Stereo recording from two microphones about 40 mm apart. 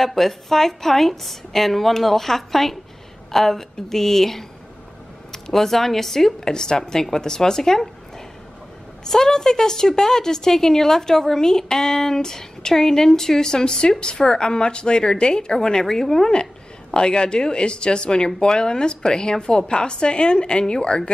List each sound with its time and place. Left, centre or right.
0.0 s a woman's voice: centre
9.0 s a woman's voice: centre